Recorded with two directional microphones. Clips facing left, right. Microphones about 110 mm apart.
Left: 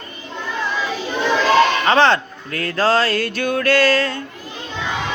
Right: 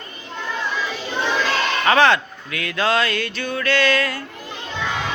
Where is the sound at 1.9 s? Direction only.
30° left (ahead or behind).